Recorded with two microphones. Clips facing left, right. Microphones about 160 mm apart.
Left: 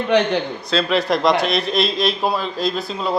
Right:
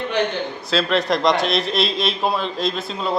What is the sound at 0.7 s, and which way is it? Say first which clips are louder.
Speech: left 1 dB; centre (ahead or behind).